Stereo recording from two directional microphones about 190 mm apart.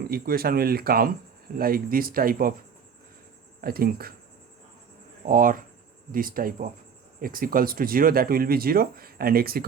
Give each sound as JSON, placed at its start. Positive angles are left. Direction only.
{"t": 0.0, "sound": "speech", "side_deg": -55}
{"t": 3.6, "sound": "speech", "side_deg": -55}
{"t": 5.2, "sound": "speech", "side_deg": -45}